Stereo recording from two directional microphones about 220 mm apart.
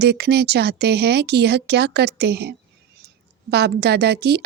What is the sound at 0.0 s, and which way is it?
Speech, 50° right (ahead or behind).